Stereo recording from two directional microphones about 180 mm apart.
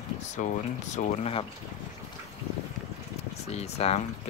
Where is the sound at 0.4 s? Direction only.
45° left (ahead or behind).